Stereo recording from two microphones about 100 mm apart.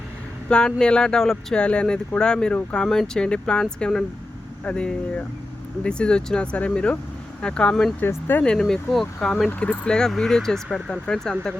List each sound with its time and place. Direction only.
0.4 s speech: 10° left (ahead or behind)
8.0 s speech: 20° left (ahead or behind)
8.4 s speech: 5° left (ahead or behind)
9.5 s speech: 15° left (ahead or behind)